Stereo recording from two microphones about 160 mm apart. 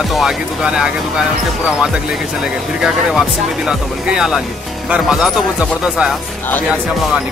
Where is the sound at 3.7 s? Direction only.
5° right (ahead or behind).